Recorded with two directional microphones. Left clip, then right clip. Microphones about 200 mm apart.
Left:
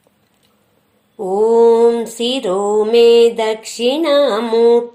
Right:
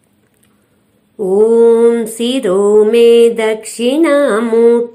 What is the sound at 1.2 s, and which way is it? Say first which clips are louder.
Mantra: right 3 dB; centre (ahead or behind).